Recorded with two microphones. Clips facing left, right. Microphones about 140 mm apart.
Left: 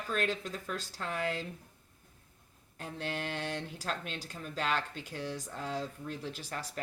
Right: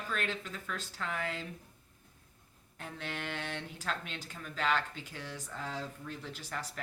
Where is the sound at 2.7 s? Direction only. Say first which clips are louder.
Left 4 dB; 35° left (ahead or behind).